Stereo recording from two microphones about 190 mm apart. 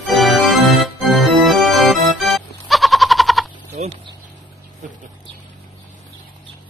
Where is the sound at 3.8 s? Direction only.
35° right (ahead or behind).